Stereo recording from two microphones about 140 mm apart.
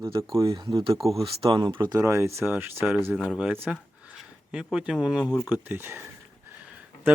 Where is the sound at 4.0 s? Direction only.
10° right (ahead or behind).